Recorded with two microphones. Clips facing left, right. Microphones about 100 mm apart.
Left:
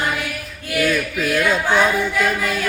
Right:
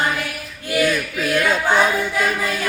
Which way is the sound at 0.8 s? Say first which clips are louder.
Left 2 dB; centre (ahead or behind).